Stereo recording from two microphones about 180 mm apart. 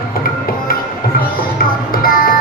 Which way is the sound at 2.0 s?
55° left (ahead or behind).